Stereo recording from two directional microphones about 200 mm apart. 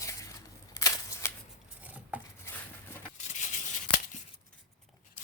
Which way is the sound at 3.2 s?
35° left (ahead or behind).